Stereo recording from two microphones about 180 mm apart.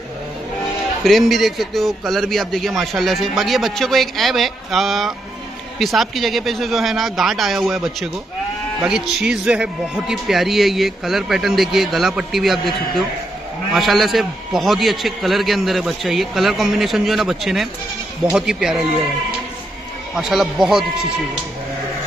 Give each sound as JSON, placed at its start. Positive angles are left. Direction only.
{"t": 1.0, "sound": "a man's voice", "side_deg": 0}
{"t": 20.2, "sound": "a man's voice", "side_deg": 0}